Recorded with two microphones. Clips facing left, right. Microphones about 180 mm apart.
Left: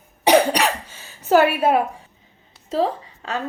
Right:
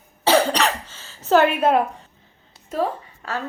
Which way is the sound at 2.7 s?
25° left (ahead or behind).